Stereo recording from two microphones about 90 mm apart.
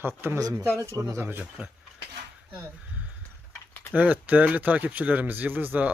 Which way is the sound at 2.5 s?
15° right (ahead or behind).